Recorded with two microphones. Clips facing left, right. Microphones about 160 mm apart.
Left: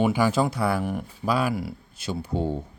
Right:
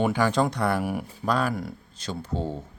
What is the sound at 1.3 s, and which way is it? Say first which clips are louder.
Speech: left 1 dB; 5° left (ahead or behind).